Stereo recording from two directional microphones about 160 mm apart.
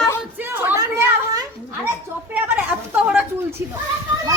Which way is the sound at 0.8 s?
25° right (ahead or behind).